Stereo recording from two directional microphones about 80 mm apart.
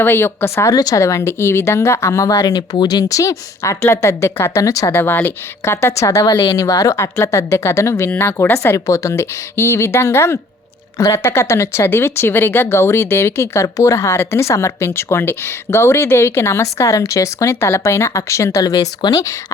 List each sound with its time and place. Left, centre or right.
0.0 s speech: left
0.8 s speech: left
4.6 s speech: left
4.9 s speech: left